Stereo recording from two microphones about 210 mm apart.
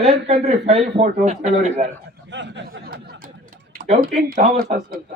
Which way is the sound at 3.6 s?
40° right (ahead or behind).